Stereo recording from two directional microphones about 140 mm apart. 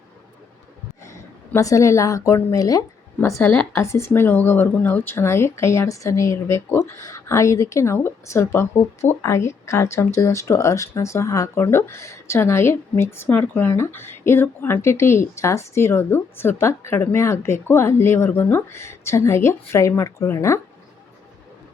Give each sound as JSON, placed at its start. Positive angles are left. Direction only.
{"t": 1.5, "sound": "a woman's voice", "side_deg": 20}
{"t": 3.4, "sound": "a woman's voice", "side_deg": 5}
{"t": 3.7, "sound": "speech", "side_deg": 20}